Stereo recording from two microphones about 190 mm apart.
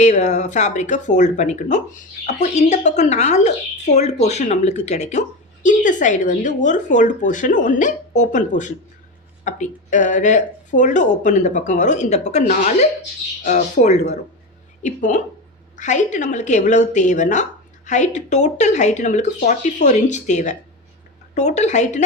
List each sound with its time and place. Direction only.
0.0 s a woman's voice: 40° left (ahead or behind)